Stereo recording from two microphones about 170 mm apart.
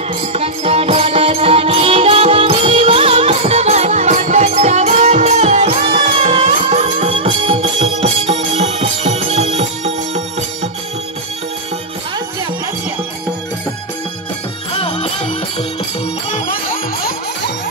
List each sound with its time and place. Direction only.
0.3 s music: 35° right (ahead or behind)
14.8 s music: 30° left (ahead or behind)